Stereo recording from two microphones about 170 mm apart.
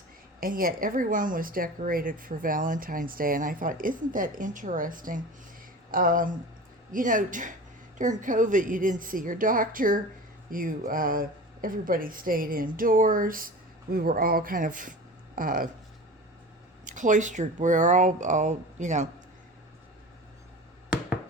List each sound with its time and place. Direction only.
0.3 s speech: 55° right (ahead or behind)
16.8 s speech: 50° right (ahead or behind)